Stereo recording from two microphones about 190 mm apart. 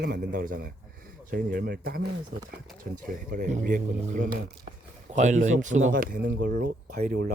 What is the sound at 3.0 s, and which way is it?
Speech, 45° right (ahead or behind).